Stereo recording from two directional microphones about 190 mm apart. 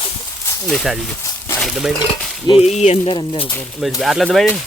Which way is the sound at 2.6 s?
35° left (ahead or behind).